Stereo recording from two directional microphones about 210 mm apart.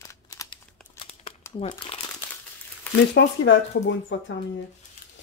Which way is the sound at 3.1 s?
60° left (ahead or behind).